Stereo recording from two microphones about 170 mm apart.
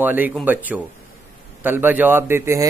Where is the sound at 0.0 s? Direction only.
10° right (ahead or behind).